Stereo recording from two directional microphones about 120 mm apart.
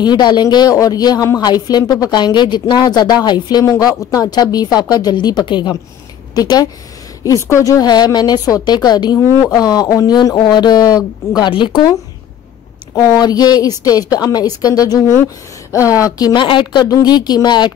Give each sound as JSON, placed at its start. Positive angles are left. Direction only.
{"t": 0.0, "sound": "a woman's voice", "side_deg": 35}
{"t": 7.2, "sound": "a woman's voice", "side_deg": 25}